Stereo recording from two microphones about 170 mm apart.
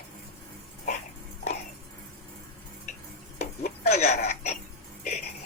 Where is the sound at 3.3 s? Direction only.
45° left (ahead or behind).